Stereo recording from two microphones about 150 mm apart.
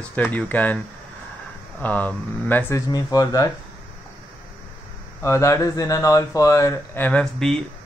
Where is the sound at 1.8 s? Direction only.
10° left (ahead or behind).